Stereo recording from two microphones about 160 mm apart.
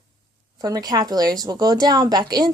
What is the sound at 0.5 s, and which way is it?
Speech, 25° right (ahead or behind).